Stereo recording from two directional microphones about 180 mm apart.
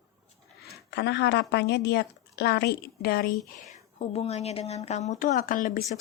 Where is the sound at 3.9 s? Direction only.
35° left (ahead or behind).